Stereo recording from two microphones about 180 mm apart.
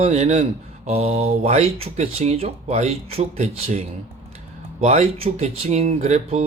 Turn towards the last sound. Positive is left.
turn(degrees=-40)  # may be behind; listen again after turning